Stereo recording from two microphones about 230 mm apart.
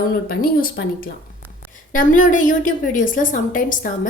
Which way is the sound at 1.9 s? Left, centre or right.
Left.